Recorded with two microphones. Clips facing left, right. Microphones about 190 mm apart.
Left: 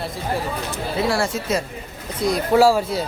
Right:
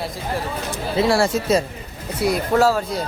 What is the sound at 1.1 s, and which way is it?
Speech, 30° right (ahead or behind).